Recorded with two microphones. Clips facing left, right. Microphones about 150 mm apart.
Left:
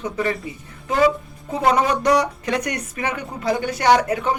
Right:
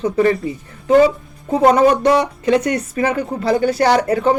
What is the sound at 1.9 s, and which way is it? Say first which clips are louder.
Speech: right 4 dB; 25° right (ahead or behind).